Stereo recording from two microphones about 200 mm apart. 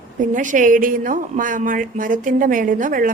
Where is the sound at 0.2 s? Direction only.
40° right (ahead or behind).